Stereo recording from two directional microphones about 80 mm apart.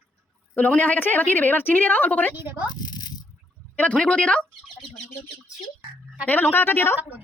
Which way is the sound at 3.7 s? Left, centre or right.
Centre.